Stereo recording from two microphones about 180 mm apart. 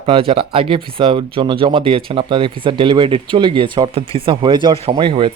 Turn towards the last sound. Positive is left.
turn(degrees=-25)  # may be behind; listen again after turning